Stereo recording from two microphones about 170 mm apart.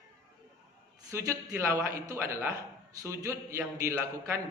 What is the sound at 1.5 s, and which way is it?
A man's voice, 15° right (ahead or behind).